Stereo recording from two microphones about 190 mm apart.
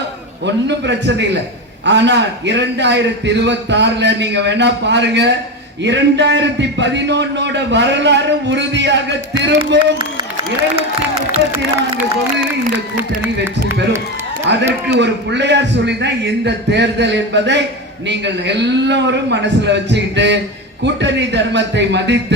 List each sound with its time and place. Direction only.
0.4 s a man's voice: 65° right (ahead or behind)
11.5 s speech: 15° right (ahead or behind)
14.5 s a man's voice: 65° right (ahead or behind)